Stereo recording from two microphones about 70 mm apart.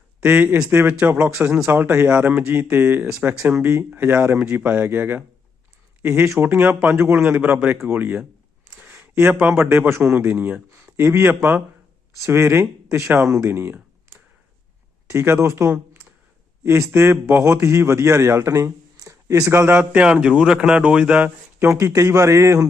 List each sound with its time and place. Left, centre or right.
0.3 s speech: right
1.4 s speech: centre
1.7 s speech: right
3.5 s a man's voice: right
6.4 s a man's voice: right
7.3 s speech: right
8.7 s a sound: right
9.6 s a man's voice: right
12.2 s a man's voice: right
15.1 s a man's voice: right
19.8 s speech: centre
21.6 s a man's voice: right